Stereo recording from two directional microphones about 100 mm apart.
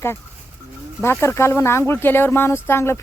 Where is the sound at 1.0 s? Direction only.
25° left (ahead or behind).